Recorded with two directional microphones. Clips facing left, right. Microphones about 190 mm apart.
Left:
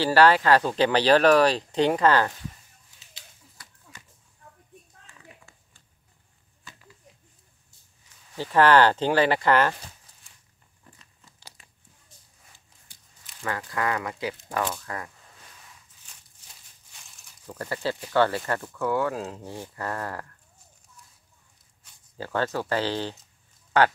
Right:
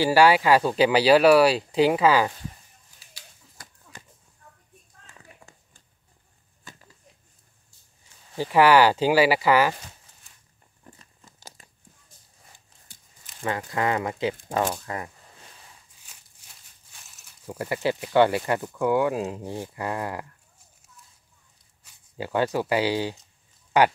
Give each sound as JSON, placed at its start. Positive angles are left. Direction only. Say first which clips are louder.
{"t": 0.0, "sound": "speech", "louder": "right 1 dB", "side_deg": -10}
{"t": 3.6, "sound": "a sound", "louder": "right 5 dB", "side_deg": -45}
{"t": 6.6, "sound": "a sound", "louder": "right 2 dB", "side_deg": -40}
{"t": 8.4, "sound": "speech", "louder": "right 1 dB", "side_deg": -10}
{"t": 10.8, "sound": "crumpling", "louder": "right 5 dB", "side_deg": -45}
{"t": 13.4, "sound": "speech", "louder": "right 3 dB", "side_deg": -25}
{"t": 16.1, "sound": "a sound", "louder": "right 1 dB", "side_deg": -5}
{"t": 17.1, "sound": "speech", "louder": "right 4 dB", "side_deg": -10}
{"t": 22.1, "sound": "speech", "louder": "right 3 dB", "side_deg": -15}